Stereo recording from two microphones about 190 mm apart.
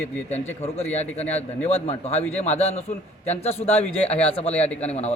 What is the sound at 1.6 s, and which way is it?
Speech, 30° left (ahead or behind).